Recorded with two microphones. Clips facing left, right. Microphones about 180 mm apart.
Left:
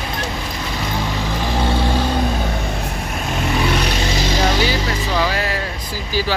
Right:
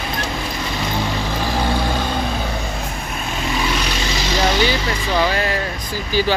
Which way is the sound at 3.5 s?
55° left (ahead or behind).